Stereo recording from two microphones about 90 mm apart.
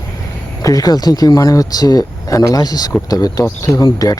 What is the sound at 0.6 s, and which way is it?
Speech, 45° left (ahead or behind).